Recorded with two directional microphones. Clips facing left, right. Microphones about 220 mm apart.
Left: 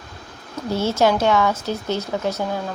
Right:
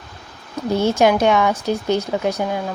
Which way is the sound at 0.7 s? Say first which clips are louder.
Right 3 dB; 15° right (ahead or behind).